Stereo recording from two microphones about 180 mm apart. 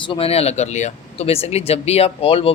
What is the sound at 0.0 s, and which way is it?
Speech, 30° left (ahead or behind).